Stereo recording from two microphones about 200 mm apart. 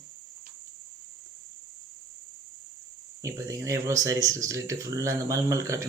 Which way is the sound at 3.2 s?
15° right (ahead or behind).